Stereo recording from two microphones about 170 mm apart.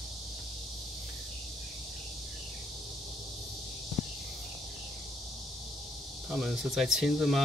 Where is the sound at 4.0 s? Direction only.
Centre (ahead or behind).